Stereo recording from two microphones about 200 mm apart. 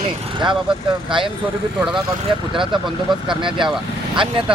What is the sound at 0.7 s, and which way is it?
Speech, 25° right (ahead or behind).